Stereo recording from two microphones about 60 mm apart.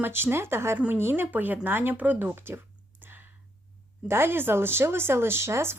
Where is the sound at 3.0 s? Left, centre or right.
Right.